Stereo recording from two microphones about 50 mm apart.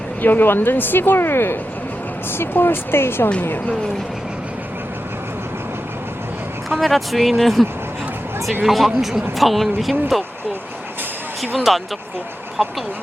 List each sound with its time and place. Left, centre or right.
0.2 s speech: left
6.7 s speech: centre
11.7 s speech: centre